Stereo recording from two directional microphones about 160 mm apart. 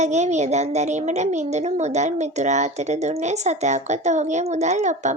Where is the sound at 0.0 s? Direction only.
45° right (ahead or behind).